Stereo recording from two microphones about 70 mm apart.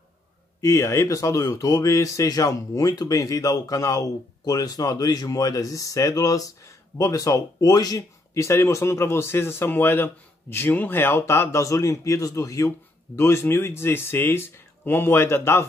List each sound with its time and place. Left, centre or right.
0.6 s speech: left
8.4 s a man's voice: left